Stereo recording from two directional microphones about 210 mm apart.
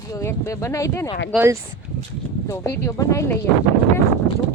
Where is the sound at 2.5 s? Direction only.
10° left (ahead or behind).